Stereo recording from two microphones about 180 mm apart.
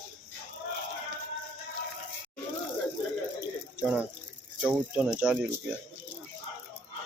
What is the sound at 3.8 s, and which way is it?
Speech, 5° right (ahead or behind).